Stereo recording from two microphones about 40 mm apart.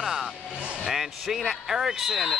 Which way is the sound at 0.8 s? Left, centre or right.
Centre.